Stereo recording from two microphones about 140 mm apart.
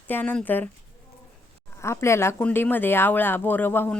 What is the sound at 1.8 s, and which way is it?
Speech, 20° left (ahead or behind).